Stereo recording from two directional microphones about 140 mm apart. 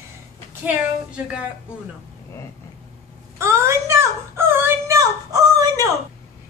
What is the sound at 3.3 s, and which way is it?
Wail, 20° right (ahead or behind).